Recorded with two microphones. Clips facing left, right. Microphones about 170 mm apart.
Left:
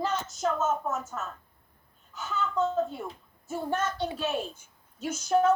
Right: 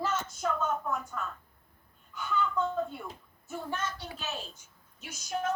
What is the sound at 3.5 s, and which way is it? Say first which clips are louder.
A woman's voice: left 6 dB; 45° left (ahead or behind).